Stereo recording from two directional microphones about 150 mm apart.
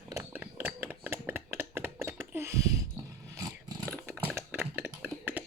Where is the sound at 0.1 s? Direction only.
15° right (ahead or behind).